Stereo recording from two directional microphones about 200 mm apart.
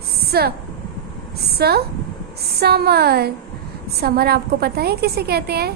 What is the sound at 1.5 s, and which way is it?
A woman's voice, 50° right (ahead or behind).